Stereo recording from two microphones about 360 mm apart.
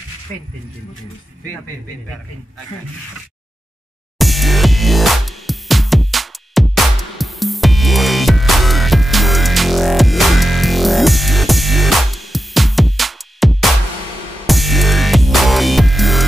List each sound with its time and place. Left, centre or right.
4.2 s music: centre